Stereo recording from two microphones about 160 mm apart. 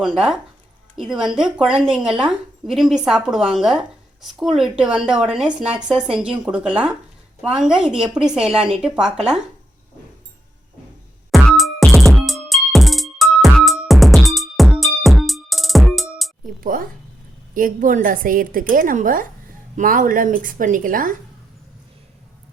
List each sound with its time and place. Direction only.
0.0 s a woman's voice: centre (ahead or behind)
11.3 s music: centre (ahead or behind)
16.6 s a woman's voice: 60° right (ahead or behind)